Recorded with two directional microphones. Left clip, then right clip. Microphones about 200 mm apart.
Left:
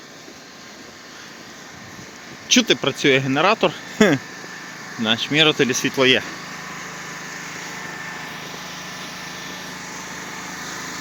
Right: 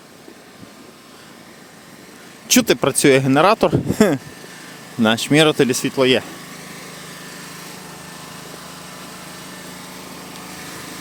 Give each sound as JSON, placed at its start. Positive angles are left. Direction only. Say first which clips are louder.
{"t": 2.6, "sound": "speech", "louder": "right 4 dB", "side_deg": -40}
{"t": 5.0, "sound": "speech", "louder": "right 2 dB", "side_deg": -40}
{"t": 9.2, "sound": "light engine", "louder": "left 3 dB", "side_deg": -65}